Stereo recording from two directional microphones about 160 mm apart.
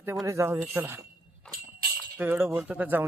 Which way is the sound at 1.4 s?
5° left (ahead or behind).